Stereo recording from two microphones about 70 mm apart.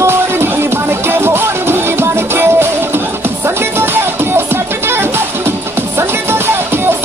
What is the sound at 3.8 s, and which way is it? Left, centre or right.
Music, right.